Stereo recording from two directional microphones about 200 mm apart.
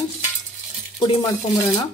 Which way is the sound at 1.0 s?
20° left (ahead or behind).